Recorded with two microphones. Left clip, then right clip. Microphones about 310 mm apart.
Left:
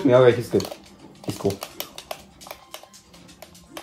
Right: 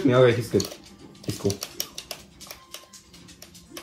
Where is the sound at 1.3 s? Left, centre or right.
Left.